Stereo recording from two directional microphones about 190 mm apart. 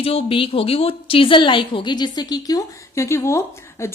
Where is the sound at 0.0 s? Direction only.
30° left (ahead or behind).